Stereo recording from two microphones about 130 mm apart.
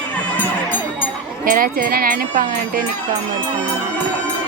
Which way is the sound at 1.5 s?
90° right.